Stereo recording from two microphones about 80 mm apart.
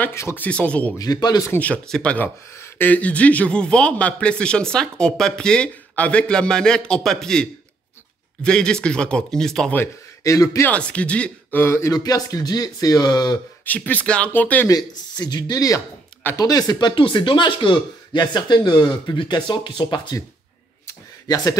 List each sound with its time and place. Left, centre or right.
0.1 s speech: left
0.4 s speech: centre
0.9 s speech: left
1.9 s speech: centre
2.1 s speech: left
2.9 s speech: centre
10.2 s speech: left
10.7 s speech: centre
11.6 s speech: left
11.9 s speech: left
13.7 s speech: left
14.7 s speech: left